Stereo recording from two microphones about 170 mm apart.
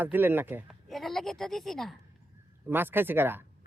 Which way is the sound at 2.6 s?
10° right (ahead or behind).